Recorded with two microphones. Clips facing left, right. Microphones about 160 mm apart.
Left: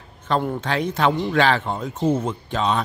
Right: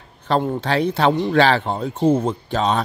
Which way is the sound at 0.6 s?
35° right (ahead or behind).